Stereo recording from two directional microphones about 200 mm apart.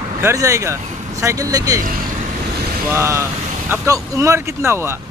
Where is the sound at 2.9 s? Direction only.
15° right (ahead or behind).